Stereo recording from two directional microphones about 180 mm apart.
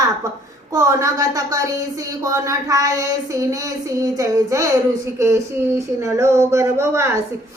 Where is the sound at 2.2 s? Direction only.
15° right (ahead or behind).